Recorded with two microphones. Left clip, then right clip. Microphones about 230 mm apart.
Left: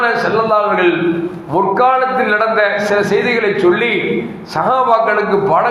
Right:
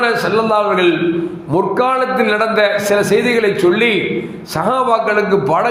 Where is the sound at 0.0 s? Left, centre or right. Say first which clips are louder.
Left 1 dB; right.